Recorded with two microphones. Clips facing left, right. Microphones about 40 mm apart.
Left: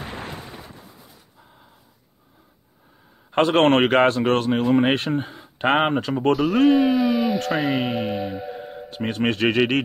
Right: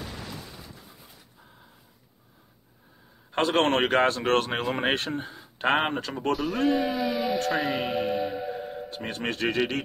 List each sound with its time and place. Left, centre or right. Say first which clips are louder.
0.0 s a sound: left 5 dB; left
3.3 s a sound: left 6 dB; left
3.5 s a man's voice: left 6 dB; left
4.4 s speech: left 6 dB; centre
4.9 s speech: left 6 dB; left
5.9 s a man's voice: left 8 dB; left
6.3 s speech: left 8 dB; centre
8.9 s speech: left 10 dB; left